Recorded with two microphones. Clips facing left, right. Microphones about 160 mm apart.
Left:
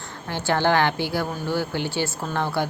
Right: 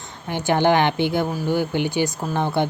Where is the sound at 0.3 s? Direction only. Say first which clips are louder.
Right 3 dB; 15° right (ahead or behind).